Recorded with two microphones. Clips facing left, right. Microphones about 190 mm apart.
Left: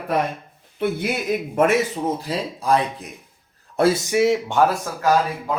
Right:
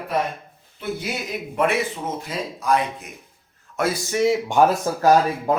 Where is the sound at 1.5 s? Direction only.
45° left (ahead or behind).